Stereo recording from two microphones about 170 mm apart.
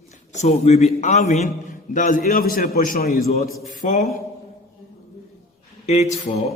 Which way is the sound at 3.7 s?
50° left (ahead or behind).